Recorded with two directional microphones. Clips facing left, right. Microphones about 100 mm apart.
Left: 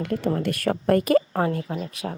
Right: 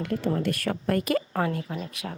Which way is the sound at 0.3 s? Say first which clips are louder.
Left 3 dB; 50° left (ahead or behind).